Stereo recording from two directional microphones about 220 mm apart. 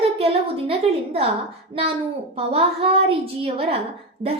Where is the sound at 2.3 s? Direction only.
25° right (ahead or behind).